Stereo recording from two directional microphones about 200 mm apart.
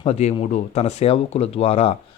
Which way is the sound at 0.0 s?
30° left (ahead or behind).